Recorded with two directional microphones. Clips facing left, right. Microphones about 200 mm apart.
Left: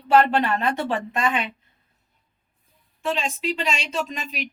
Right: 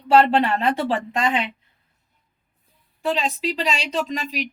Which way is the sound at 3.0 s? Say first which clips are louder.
Right 2 dB; 35° right (ahead or behind).